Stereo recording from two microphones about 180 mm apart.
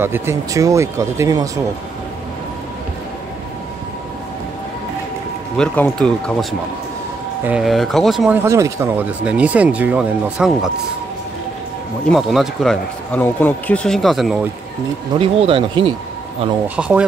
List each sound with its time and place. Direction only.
0.0 s speech: 15° right (ahead or behind)
5.6 s speech: 5° left (ahead or behind)
7.4 s speech: 5° right (ahead or behind)
8.4 s speech: 15° right (ahead or behind)
12.1 s speech: centre (ahead or behind)
15.1 s speech: 30° right (ahead or behind)
16.6 s speech: 5° right (ahead or behind)